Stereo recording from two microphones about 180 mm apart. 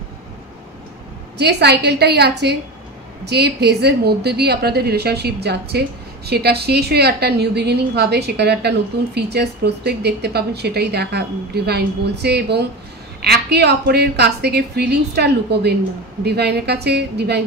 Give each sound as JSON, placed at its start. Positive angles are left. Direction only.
{"t": 1.4, "sound": "a woman's voice", "side_deg": -65}